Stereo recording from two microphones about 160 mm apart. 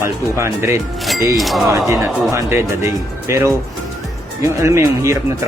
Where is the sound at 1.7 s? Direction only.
20° right (ahead or behind).